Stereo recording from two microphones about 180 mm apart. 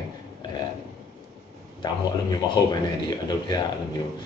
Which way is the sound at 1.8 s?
20° left (ahead or behind).